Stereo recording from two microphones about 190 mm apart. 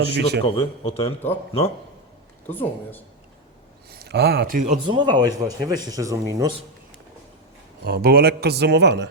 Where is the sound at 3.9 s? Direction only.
60° right (ahead or behind).